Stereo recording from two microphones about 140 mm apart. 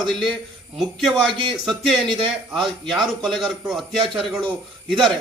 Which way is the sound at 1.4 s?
35° right (ahead or behind).